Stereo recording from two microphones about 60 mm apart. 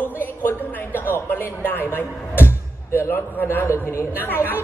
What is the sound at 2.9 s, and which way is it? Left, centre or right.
A man's voice, left.